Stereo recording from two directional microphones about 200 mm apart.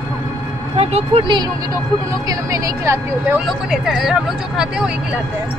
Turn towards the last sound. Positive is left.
turn(degrees=-5)  # may be behind; listen again after turning